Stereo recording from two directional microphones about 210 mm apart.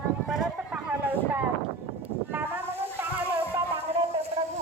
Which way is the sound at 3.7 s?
30° right (ahead or behind).